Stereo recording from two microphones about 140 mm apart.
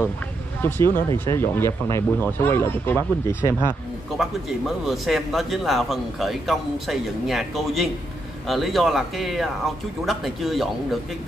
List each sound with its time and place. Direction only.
0.6 s speech: 15° left (ahead or behind)
4.2 s a man's voice: centre (ahead or behind)